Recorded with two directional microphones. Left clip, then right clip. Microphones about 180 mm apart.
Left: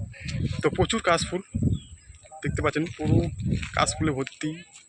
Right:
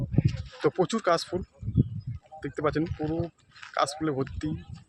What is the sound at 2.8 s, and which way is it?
Speech, 15° left (ahead or behind).